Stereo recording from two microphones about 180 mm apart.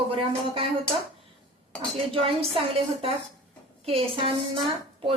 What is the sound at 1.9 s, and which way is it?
Speech, 30° right (ahead or behind).